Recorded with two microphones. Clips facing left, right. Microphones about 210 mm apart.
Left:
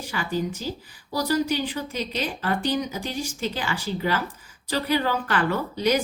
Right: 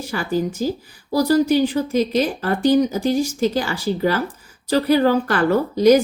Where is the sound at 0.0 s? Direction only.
40° right (ahead or behind).